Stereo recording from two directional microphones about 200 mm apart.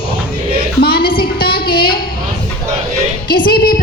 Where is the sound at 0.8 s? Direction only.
50° left (ahead or behind).